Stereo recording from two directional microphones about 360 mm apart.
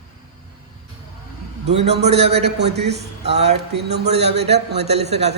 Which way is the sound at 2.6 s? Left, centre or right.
Right.